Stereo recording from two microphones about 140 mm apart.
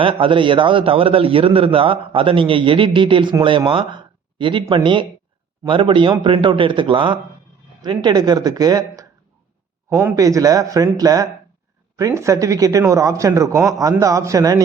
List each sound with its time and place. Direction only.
0.0 s a man's voice: 40° right (ahead or behind)